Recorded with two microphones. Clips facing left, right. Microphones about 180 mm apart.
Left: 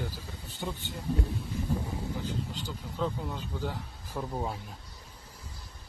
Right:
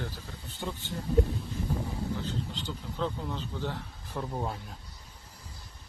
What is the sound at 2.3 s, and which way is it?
Speech, 10° left (ahead or behind).